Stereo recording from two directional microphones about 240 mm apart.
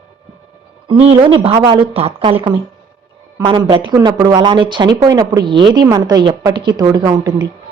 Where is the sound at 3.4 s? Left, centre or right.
Centre.